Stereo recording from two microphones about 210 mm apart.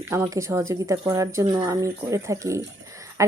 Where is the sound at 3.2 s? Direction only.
15° right (ahead or behind).